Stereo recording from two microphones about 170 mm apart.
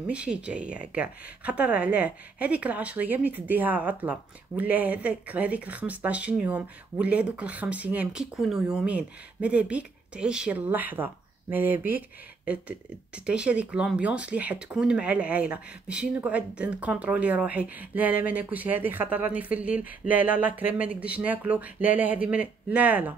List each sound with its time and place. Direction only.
0.0 s speech: 5° right (ahead or behind)